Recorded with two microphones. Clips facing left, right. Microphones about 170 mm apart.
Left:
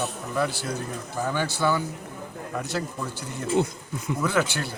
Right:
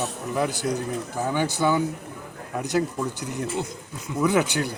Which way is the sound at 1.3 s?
15° right (ahead or behind).